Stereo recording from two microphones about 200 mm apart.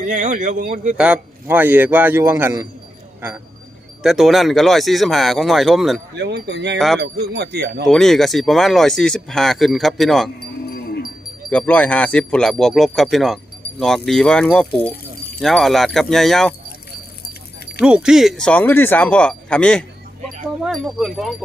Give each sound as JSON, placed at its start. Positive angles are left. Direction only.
{"t": 0.1, "sound": "a man's voice", "side_deg": -40}
{"t": 0.9, "sound": "a man's voice", "side_deg": -5}
{"t": 6.1, "sound": "speech", "side_deg": -55}
{"t": 6.7, "sound": "speech", "side_deg": 0}
{"t": 7.0, "sound": "speech", "side_deg": -55}
{"t": 7.9, "sound": "speech", "side_deg": 0}
{"t": 11.4, "sound": "speech", "side_deg": 5}
{"t": 17.8, "sound": "speech", "side_deg": -5}